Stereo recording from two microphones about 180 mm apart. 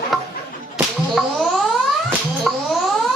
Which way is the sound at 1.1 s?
Centre (ahead or behind).